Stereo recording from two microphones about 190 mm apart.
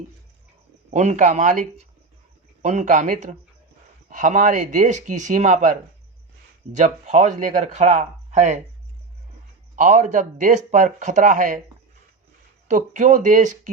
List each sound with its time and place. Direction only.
0.9 s speech: 35° right (ahead or behind)
6.7 s speech: 40° right (ahead or behind)
9.7 s speech: 40° right (ahead or behind)
12.6 s speech: 40° right (ahead or behind)